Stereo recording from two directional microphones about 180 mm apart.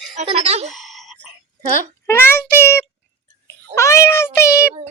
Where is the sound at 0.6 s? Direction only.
Centre (ahead or behind).